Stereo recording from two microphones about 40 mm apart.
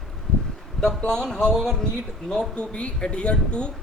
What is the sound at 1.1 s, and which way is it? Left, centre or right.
Speech, centre.